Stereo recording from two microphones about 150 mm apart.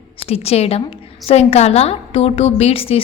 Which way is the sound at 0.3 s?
45° left (ahead or behind).